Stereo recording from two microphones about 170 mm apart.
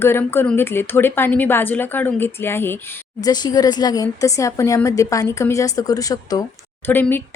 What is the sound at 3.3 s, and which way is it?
A woman's voice, 25° left (ahead or behind).